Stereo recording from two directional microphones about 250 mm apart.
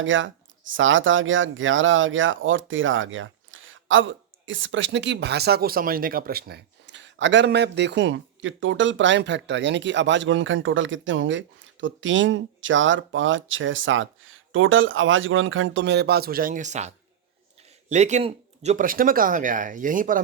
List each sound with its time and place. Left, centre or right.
0.0 s speech: right